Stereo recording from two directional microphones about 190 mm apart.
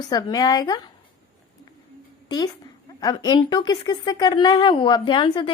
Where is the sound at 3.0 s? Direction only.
20° left (ahead or behind).